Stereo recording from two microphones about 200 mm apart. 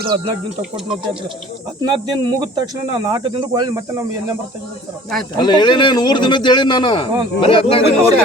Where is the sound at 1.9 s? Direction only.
20° right (ahead or behind).